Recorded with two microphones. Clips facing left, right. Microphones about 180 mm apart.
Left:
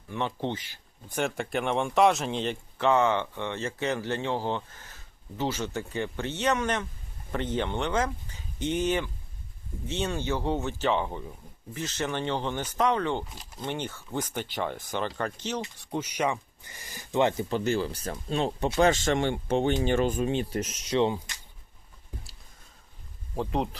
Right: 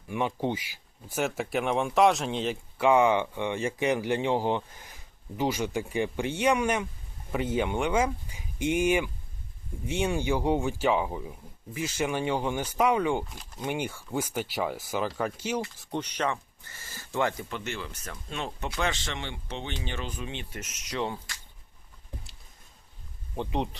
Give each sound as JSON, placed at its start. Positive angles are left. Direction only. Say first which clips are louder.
{"t": 0.1, "sound": "speech", "louder": "right 2 dB", "side_deg": -10}
{"t": 15.8, "sound": "speech", "louder": "left 2 dB", "side_deg": 5}
{"t": 17.5, "sound": "speech", "louder": "left 9 dB", "side_deg": 35}
{"t": 23.3, "sound": "speech", "louder": "left 2 dB", "side_deg": 0}